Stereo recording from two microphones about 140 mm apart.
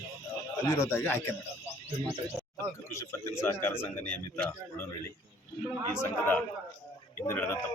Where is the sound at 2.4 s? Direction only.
Centre (ahead or behind).